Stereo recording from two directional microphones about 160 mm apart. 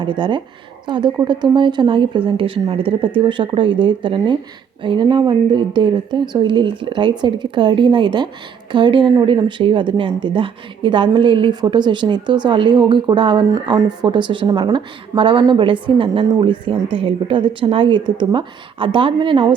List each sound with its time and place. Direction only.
0.0 s a woman's voice: 30° right (ahead or behind)